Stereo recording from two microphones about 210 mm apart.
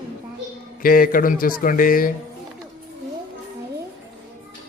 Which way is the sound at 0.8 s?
45° left (ahead or behind).